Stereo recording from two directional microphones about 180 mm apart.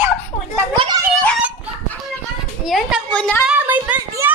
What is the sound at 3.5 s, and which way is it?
Children playing, 10° right (ahead or behind).